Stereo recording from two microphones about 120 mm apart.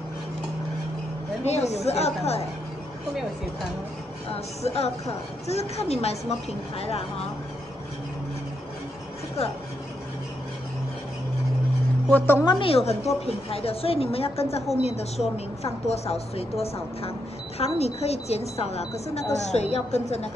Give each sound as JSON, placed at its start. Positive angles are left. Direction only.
{"t": 1.4, "sound": "a woman's voice", "side_deg": 65}
{"t": 4.3, "sound": "a woman's voice", "side_deg": 60}
{"t": 12.1, "sound": "a woman's voice", "side_deg": 20}
{"t": 12.4, "sound": "a woman's voice", "side_deg": 45}